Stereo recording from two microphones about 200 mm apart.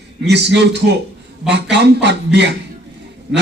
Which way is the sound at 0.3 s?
60° right (ahead or behind).